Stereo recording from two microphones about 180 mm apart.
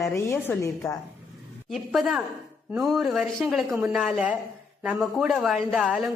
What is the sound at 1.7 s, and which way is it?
Speech, centre (ahead or behind).